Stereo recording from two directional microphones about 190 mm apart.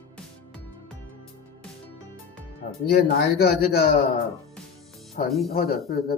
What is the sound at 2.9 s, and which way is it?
Speech, 55° left (ahead or behind).